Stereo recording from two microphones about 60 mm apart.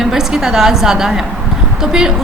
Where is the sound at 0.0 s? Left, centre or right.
Centre.